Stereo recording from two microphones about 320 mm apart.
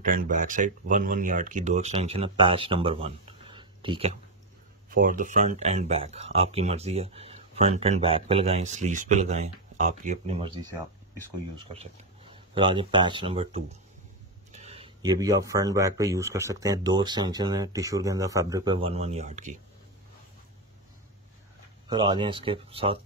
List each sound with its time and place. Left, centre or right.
0.0 s speech: right
4.8 s speech: right
21.8 s speech: centre